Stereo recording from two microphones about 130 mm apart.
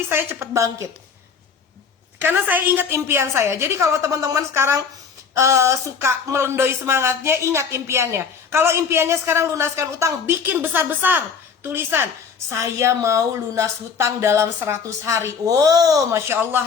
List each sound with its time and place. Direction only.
0.1 s speech: 20° right (ahead or behind)
2.2 s a woman's voice: 15° right (ahead or behind)